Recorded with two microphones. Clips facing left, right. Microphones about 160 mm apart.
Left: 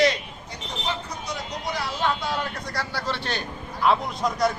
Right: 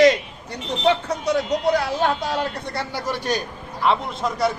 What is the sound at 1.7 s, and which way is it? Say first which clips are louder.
Speech: right 6 dB; 50° right (ahead or behind).